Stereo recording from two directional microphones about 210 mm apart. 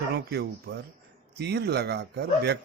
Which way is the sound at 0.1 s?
50° right (ahead or behind).